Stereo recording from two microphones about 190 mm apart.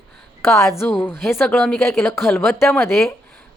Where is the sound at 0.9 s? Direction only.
Centre (ahead or behind).